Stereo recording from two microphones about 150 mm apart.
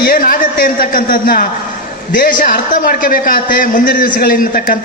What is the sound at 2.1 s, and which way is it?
A man's voice, 65° left (ahead or behind).